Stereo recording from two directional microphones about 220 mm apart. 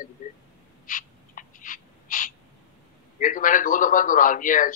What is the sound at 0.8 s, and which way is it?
Owl, 35° left (ahead or behind).